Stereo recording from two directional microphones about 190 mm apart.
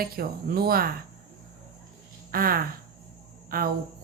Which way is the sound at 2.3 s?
50° right (ahead or behind).